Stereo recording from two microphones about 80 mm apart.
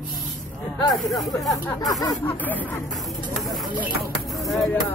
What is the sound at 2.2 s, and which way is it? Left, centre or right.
Speech, left.